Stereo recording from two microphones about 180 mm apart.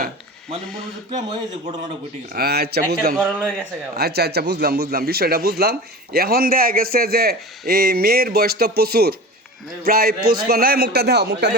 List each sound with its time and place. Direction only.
1.1 s a man's voice: 30° right (ahead or behind)
2.3 s a man's voice: 60° right (ahead or behind)